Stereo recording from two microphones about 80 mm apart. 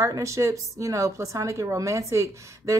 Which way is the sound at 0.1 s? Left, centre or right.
Right.